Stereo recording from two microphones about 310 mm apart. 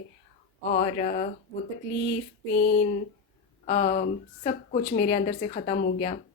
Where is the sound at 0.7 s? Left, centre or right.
Left.